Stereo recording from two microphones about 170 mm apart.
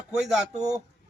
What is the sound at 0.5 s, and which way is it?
Speech, 40° right (ahead or behind).